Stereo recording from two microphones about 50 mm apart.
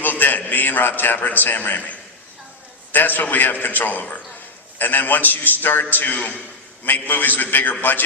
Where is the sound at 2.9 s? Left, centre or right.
Left.